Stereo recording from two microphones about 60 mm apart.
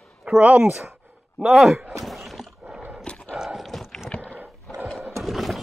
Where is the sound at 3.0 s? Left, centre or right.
Centre.